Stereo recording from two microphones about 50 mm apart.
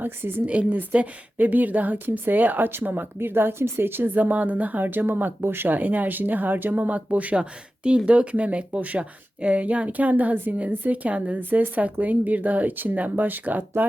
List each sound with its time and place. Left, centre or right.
0.0 s a woman's voice: right
0.7 s speech: right